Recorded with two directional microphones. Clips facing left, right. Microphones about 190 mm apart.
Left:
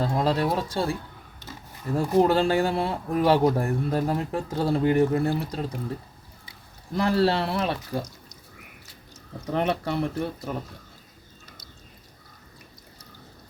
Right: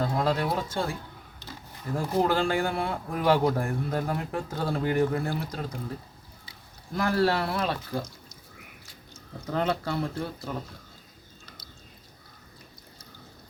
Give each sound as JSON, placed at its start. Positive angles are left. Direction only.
{"t": 0.0, "sound": "speech", "side_deg": 30}
{"t": 2.0, "sound": "speech", "side_deg": 30}
{"t": 6.9, "sound": "speech", "side_deg": 30}
{"t": 9.5, "sound": "speech", "side_deg": 20}